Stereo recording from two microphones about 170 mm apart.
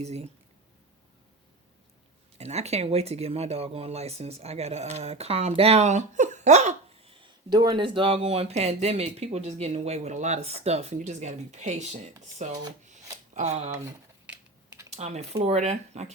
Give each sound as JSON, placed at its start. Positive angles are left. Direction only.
{"t": 0.0, "sound": "speech", "side_deg": -40}
{"t": 2.4, "sound": "speech", "side_deg": -40}
{"t": 14.8, "sound": "speech", "side_deg": -40}